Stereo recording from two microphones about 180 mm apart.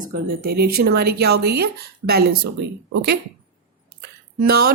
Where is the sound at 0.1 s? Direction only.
60° right (ahead or behind).